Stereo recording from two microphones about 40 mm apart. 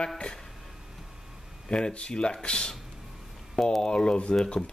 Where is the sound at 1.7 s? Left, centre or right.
Left.